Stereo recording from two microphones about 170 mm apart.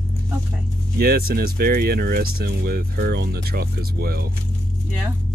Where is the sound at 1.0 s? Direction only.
60° right (ahead or behind).